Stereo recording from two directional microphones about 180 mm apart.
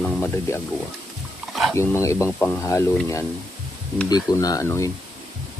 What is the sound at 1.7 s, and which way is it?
Speech, 15° left (ahead or behind).